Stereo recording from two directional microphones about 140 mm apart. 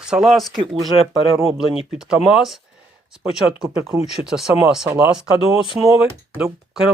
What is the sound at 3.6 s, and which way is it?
Speech, 20° right (ahead or behind).